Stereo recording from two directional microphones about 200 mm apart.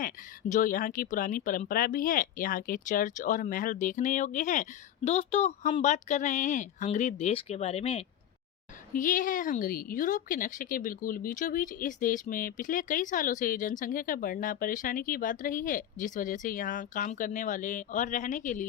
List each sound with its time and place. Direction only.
0.0 s a woman's voice: 40° left (ahead or behind)
8.9 s a woman's voice: 40° left (ahead or behind)